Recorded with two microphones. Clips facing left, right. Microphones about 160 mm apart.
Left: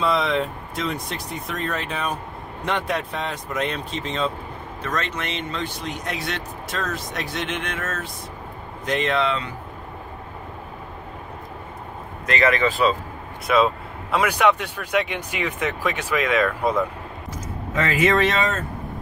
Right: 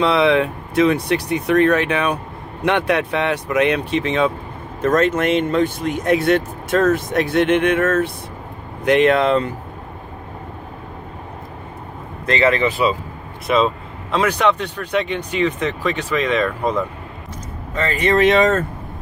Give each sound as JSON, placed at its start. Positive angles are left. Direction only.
{"t": 0.0, "sound": "speech", "side_deg": -70}
{"t": 4.8, "sound": "speech", "side_deg": -50}
{"t": 12.3, "sound": "speech", "side_deg": -30}
{"t": 12.6, "sound": "speech", "side_deg": -10}
{"t": 14.1, "sound": "speech", "side_deg": 10}
{"t": 17.9, "sound": "speech", "side_deg": 0}